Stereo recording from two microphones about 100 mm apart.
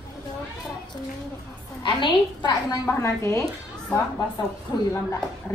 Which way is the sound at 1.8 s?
55° left (ahead or behind).